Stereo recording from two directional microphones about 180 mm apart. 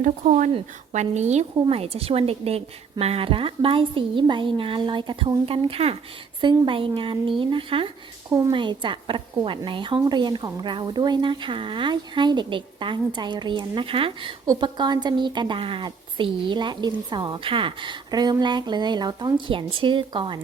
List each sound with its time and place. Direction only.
0.0 s a woman's voice: 45° right (ahead or behind); by 7.9 s 30° right (ahead or behind)
8.3 s a woman's voice: 20° right (ahead or behind)